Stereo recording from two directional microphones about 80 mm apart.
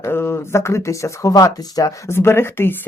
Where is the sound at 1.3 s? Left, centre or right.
Left.